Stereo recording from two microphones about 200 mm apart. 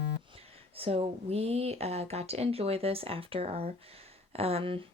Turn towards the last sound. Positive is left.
turn(degrees=-25)  # may be behind; listen again after turning